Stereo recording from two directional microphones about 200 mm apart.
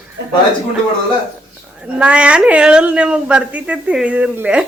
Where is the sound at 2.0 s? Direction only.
5° right (ahead or behind).